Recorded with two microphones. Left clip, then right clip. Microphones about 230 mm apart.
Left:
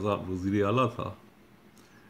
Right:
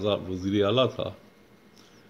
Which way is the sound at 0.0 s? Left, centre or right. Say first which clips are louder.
Right 3 dB; centre.